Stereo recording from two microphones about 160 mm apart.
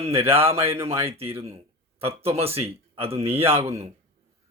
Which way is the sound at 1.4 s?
40° right (ahead or behind).